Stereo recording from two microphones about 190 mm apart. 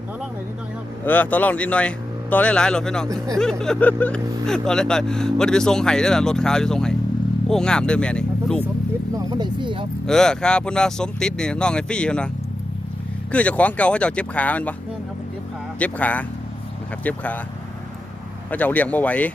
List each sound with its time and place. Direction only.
1.0 s speech: 10° left (ahead or behind)
9.1 s speech: 25° right (ahead or behind)
10.1 s speech: 5° left (ahead or behind)
13.3 s speech: 5° left (ahead or behind)
15.8 s speech: 10° left (ahead or behind)
18.5 s speech: 10° left (ahead or behind)